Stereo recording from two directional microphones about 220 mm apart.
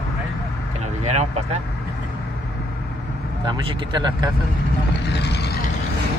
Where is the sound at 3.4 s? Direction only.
20° right (ahead or behind).